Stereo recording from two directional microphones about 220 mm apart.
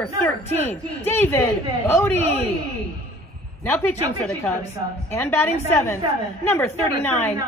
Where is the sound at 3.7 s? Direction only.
5° left (ahead or behind).